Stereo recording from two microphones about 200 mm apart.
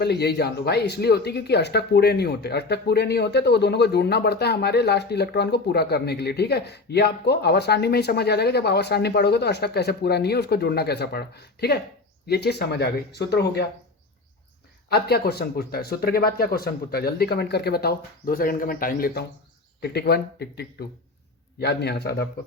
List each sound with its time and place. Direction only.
0.0 s speech: 55° left (ahead or behind)
14.8 s speech: 50° left (ahead or behind)